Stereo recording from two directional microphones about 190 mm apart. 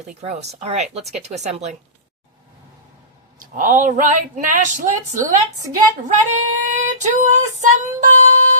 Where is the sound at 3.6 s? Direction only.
45° right (ahead or behind).